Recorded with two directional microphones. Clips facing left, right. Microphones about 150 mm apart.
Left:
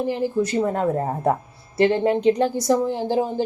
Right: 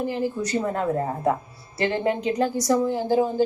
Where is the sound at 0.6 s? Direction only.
30° left (ahead or behind).